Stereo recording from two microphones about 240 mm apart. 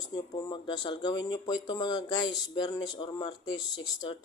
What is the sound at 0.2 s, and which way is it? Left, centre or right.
Speech, centre.